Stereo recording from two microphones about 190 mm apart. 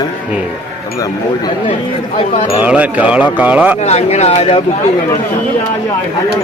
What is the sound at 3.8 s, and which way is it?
Speech, 35° left (ahead or behind).